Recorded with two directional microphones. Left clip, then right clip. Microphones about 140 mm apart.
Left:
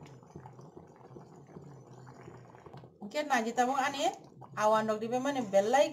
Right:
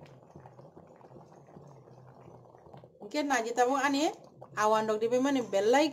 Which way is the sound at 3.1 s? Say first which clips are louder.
Right 1 dB; 90° right.